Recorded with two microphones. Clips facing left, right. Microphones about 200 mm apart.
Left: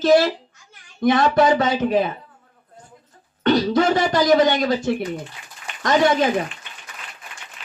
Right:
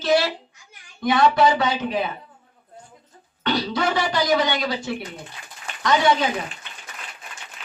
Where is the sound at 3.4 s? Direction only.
45° left (ahead or behind).